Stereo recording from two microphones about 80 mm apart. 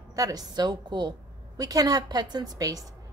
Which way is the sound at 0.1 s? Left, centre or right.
Right.